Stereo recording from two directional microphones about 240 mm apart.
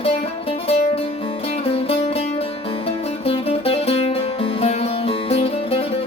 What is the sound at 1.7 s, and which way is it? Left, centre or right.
Music, left.